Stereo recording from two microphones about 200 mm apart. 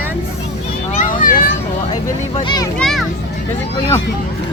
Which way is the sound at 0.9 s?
40° left (ahead or behind).